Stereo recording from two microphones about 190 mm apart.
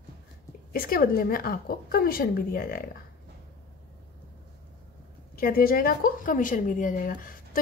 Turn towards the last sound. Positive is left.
turn(degrees=45)  # may be behind; listen again after turning